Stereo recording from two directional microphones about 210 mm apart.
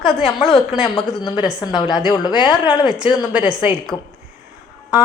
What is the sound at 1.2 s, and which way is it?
A woman's voice, 20° left (ahead or behind).